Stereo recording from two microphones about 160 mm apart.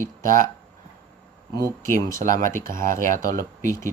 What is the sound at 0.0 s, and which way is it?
Speech, 55° right (ahead or behind).